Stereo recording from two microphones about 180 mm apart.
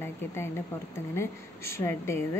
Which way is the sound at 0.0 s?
15° left (ahead or behind).